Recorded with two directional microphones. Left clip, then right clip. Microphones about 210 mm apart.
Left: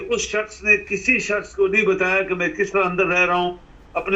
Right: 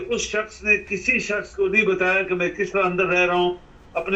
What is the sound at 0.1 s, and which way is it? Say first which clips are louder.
A man's voice: left 2 dB; 20° left (ahead or behind).